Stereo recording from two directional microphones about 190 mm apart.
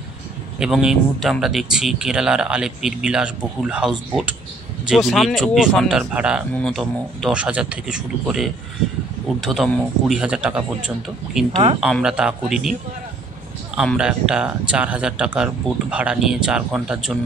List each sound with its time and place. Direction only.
0.6 s speech: 5° right (ahead or behind)
11.5 s speech: 30° right (ahead or behind)
11.8 s speech: 5° right (ahead or behind)
13.7 s speech: 5° right (ahead or behind)